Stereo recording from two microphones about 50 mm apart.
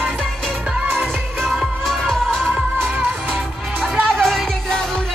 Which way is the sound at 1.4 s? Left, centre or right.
Centre.